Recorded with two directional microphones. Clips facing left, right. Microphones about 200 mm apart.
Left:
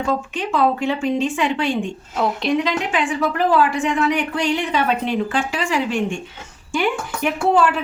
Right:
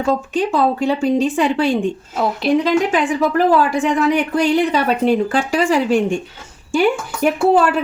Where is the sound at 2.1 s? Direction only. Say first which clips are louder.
Left 1 dB; 5° right (ahead or behind).